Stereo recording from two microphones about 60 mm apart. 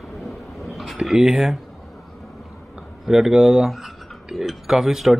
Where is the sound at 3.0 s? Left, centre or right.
Centre.